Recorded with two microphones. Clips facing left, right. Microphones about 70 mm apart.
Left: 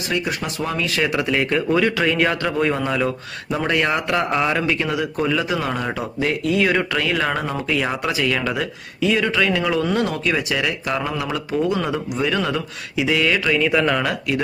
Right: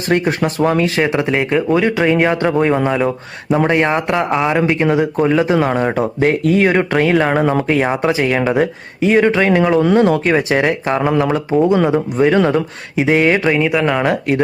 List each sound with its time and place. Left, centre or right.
0.1 s speech: right
0.9 s a man's voice: right
7.4 s a man's voice: right
13.7 s speech: centre
14.0 s speech: right